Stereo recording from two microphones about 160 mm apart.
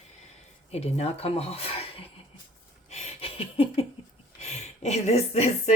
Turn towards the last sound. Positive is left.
turn(degrees=40)  # may be behind; listen again after turning